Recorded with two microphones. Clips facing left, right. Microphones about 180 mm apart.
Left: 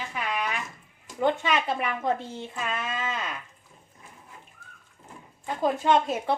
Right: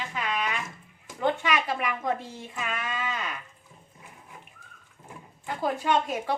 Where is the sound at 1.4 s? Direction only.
25° left (ahead or behind).